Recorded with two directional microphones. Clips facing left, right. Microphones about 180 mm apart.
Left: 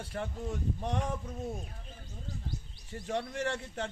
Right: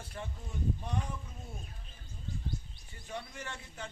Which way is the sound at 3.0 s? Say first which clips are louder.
Left 9 dB; 75° left (ahead or behind).